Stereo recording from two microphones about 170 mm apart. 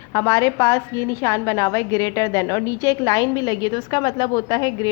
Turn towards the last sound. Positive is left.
turn(degrees=25)  # may be behind; listen again after turning